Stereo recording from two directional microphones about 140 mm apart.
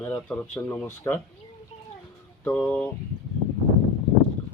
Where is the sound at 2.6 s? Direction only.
10° left (ahead or behind).